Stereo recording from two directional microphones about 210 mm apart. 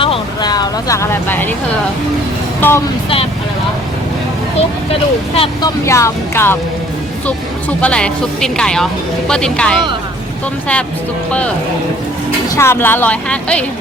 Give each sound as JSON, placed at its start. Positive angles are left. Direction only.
{"t": 0.0, "sound": "speech", "side_deg": 20}
{"t": 2.6, "sound": "speech", "side_deg": 10}
{"t": 5.3, "sound": "speech", "side_deg": 25}
{"t": 5.8, "sound": "speech", "side_deg": 15}
{"t": 11.3, "sound": "speech", "side_deg": 5}
{"t": 12.5, "sound": "speech", "side_deg": 10}